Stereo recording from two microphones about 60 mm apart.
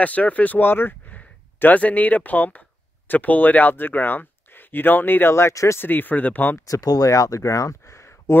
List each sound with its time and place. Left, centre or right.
0.0 s speech: left
1.1 s speech: left
5.8 s speech: left
6.6 s speech: left